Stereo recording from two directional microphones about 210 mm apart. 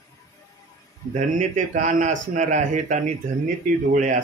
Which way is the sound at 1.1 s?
35° right (ahead or behind).